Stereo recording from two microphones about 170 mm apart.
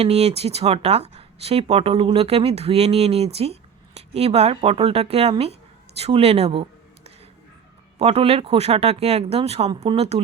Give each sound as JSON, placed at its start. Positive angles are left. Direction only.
{"t": 0.0, "sound": "speech", "side_deg": -35}